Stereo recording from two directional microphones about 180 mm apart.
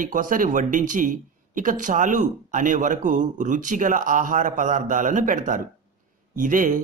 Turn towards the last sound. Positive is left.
turn(degrees=-50)  # may be behind; listen again after turning